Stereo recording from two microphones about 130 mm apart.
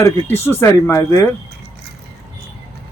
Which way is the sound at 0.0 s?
20° left (ahead or behind).